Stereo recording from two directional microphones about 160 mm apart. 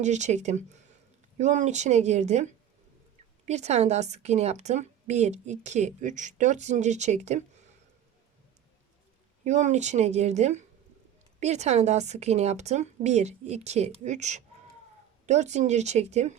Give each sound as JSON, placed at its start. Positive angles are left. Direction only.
{"t": 0.0, "sound": "a woman's voice", "side_deg": -45}
{"t": 9.4, "sound": "a woman's voice", "side_deg": -50}